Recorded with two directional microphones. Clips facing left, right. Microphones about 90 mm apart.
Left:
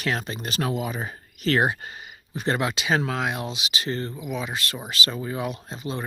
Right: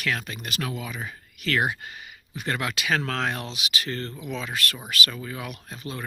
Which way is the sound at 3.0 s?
10° left (ahead or behind).